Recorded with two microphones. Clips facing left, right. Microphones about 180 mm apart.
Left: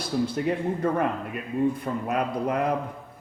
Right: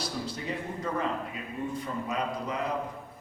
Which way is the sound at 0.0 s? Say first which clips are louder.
Left 9 dB; 55° left (ahead or behind).